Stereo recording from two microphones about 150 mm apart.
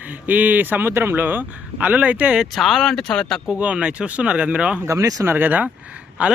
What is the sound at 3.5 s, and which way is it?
Speech, 10° right (ahead or behind).